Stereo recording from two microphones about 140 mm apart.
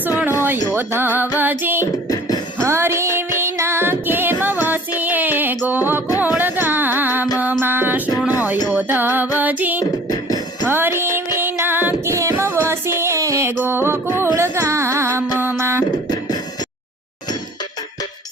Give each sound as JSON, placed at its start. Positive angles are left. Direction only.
{"t": 0.2, "sound": "a sound", "side_deg": -15}
{"t": 0.7, "sound": "music", "side_deg": -15}
{"t": 2.0, "sound": "music", "side_deg": 25}
{"t": 2.6, "sound": "music", "side_deg": -20}
{"t": 9.8, "sound": "music", "side_deg": 25}
{"t": 10.7, "sound": "music", "side_deg": -15}
{"t": 15.4, "sound": "a sound", "side_deg": -15}